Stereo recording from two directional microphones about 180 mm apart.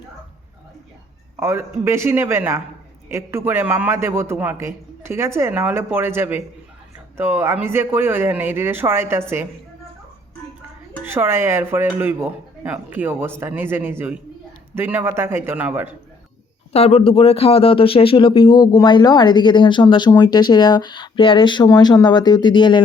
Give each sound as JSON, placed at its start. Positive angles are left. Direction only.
{"t": 1.4, "sound": "a man's voice", "side_deg": -15}
{"t": 11.0, "sound": "a man's voice", "side_deg": -10}
{"t": 16.7, "sound": "speech", "side_deg": 35}